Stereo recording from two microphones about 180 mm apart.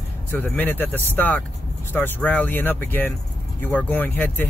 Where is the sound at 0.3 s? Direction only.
10° left (ahead or behind).